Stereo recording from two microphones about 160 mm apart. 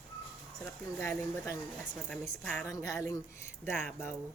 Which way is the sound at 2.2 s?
10° left (ahead or behind).